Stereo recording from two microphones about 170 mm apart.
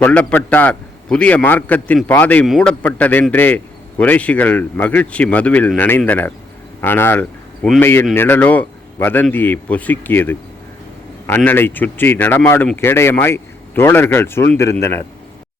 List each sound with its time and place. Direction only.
0.0 s a man's voice: 10° left (ahead or behind)